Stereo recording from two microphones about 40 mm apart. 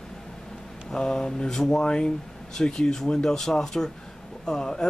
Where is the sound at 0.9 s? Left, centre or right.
Centre.